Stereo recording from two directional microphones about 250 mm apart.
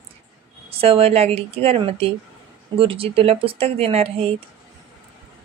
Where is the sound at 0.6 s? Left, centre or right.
Right.